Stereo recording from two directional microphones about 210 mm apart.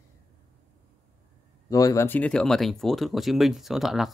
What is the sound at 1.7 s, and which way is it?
Speech, 15° left (ahead or behind).